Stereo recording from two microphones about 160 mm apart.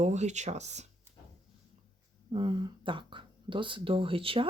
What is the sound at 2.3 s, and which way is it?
Speech, 30° right (ahead or behind).